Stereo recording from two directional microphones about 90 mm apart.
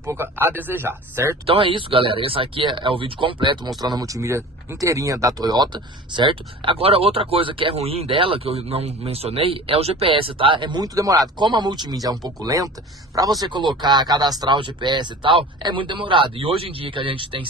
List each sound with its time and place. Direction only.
0.0 s speech: 25° right (ahead or behind)
1.4 s speech: 80° right; by 10.8 s 65° right (ahead or behind)
10.8 s speech: 40° right (ahead or behind)
11.4 s speech: 55° right (ahead or behind)
13.5 s speech: 60° right (ahead or behind)
14.6 s speech: 60° right (ahead or behind); by 17.5 s 75° right (ahead or behind)